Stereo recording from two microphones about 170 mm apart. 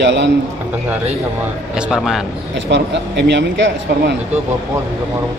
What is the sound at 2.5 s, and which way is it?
Speech, 90° right.